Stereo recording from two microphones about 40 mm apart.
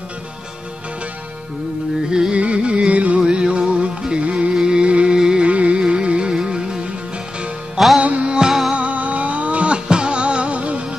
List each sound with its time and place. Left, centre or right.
2.0 s music: centre
2.3 s music: right
3.2 s music: right
5.5 s music: right
7.7 s music: centre
8.0 s music: right
8.7 s music: right